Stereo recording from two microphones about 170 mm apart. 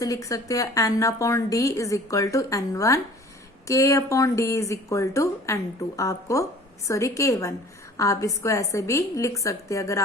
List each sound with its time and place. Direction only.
0.0 s a woman's voice: 20° left (ahead or behind)